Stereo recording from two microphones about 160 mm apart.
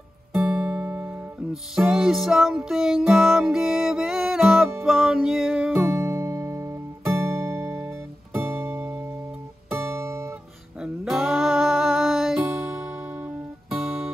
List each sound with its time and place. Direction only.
0.5 s music: 5° right (ahead or behind)
9.7 s guitar: 15° right (ahead or behind)
10.8 s music: centre (ahead or behind)